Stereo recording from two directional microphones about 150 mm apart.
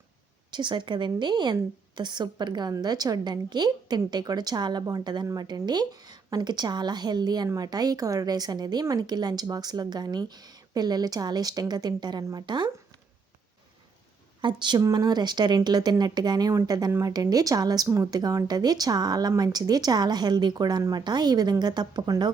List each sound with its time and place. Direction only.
0.5 s a woman's voice: 30° right (ahead or behind)
14.4 s a woman's voice: 30° right (ahead or behind)